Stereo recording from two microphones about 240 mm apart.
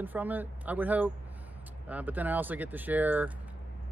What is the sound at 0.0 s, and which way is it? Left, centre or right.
Speech, centre.